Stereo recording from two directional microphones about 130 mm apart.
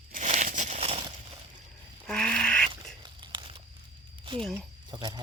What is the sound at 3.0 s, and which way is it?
Tearing, 40° right (ahead or behind).